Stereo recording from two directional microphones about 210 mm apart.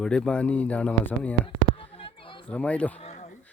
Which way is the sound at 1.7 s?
25° left (ahead or behind).